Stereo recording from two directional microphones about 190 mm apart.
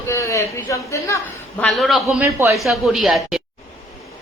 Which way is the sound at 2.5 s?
Centre (ahead or behind).